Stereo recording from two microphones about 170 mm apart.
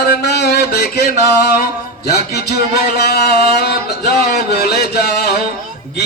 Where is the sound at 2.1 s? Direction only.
70° left (ahead or behind).